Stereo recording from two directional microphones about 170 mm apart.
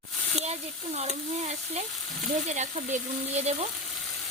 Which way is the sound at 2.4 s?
45° right (ahead or behind).